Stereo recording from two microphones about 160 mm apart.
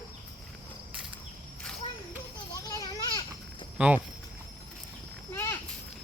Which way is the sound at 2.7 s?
25° left (ahead or behind).